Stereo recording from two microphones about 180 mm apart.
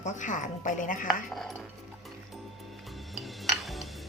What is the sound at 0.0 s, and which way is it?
A woman's voice, 45° left (ahead or behind).